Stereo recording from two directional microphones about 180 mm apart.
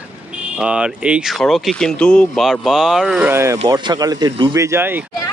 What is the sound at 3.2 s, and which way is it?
Speech, 15° right (ahead or behind).